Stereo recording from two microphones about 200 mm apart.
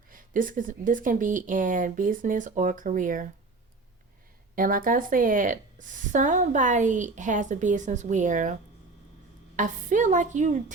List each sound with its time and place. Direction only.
0.1 s a woman's voice: 45° right (ahead or behind)
4.5 s a woman's voice: 45° right (ahead or behind)
9.6 s a woman's voice: 40° right (ahead or behind)